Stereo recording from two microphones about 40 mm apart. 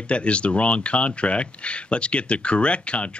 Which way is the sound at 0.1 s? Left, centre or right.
Left.